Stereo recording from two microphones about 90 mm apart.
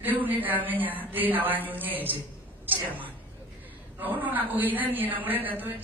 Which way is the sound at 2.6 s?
20° right (ahead or behind).